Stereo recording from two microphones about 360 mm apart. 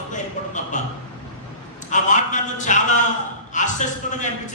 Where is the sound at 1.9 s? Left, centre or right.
Left.